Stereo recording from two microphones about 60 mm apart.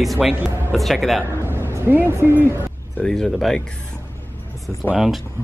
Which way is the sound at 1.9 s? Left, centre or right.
Right.